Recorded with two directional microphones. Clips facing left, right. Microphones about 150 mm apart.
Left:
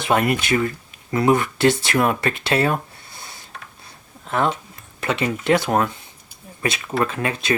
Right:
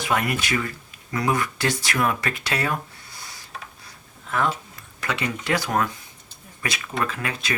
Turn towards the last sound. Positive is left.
turn(degrees=25)  # may be behind; listen again after turning